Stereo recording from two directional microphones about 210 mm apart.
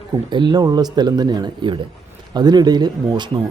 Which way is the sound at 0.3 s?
20° right (ahead or behind).